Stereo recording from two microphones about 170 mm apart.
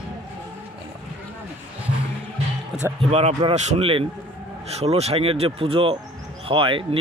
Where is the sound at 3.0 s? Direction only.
35° right (ahead or behind).